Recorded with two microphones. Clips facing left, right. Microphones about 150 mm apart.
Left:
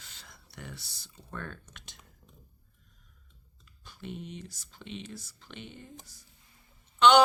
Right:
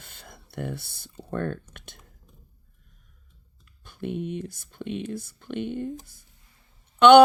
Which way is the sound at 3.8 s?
55° right (ahead or behind).